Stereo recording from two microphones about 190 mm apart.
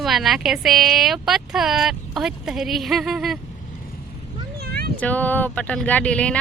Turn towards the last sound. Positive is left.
turn(degrees=5)  # may be behind; listen again after turning